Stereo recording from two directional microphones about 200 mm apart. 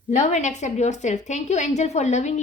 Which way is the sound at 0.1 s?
35° left (ahead or behind).